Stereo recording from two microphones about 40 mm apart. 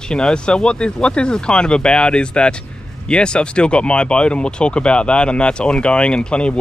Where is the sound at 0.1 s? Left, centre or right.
Left.